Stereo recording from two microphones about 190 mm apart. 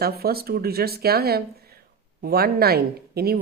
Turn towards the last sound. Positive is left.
turn(degrees=-55)  # may be behind; listen again after turning